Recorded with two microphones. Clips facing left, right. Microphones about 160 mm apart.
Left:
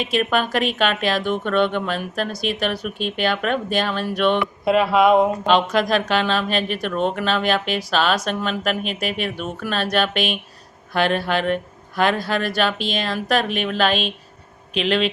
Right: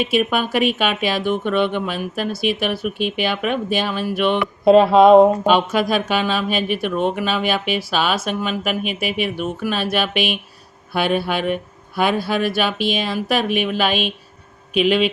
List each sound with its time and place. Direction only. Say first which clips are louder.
0.0 s speech: right 2 dB; 5° right (ahead or behind)
4.6 s mantra: right 6 dB; 30° right (ahead or behind)
5.5 s speech: right 1 dB; 10° right (ahead or behind)